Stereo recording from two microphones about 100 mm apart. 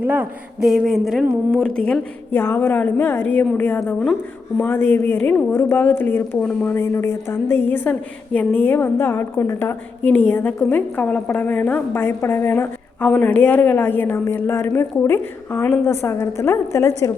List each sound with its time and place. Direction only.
0.0 s speech: 15° right (ahead or behind)
0.6 s speech: centre (ahead or behind)
2.3 s a woman's voice: 20° left (ahead or behind)
6.7 s a woman's voice: 25° left (ahead or behind)